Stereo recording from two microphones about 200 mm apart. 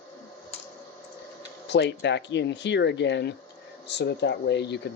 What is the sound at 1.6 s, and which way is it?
Speech, 60° left (ahead or behind).